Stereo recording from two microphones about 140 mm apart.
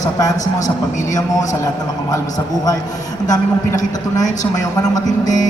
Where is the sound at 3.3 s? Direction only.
25° left (ahead or behind).